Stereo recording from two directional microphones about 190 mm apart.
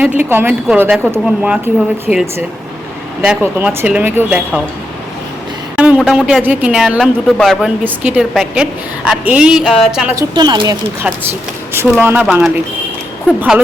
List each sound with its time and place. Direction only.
0.3 s speech: 10° right (ahead or behind)
5.7 s speech: 5° right (ahead or behind)
7.9 s speech: 10° right (ahead or behind)
10.2 s speech: 20° right (ahead or behind)
11.0 s speech: 10° right (ahead or behind)